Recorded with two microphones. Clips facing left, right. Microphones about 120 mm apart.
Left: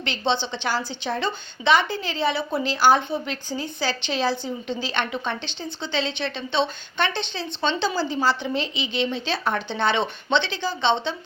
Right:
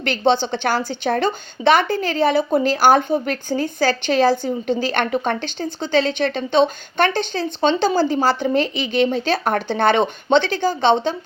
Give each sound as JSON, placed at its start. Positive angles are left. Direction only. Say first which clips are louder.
{"t": 0.0, "sound": "a woman's voice", "louder": "right 7 dB", "side_deg": -50}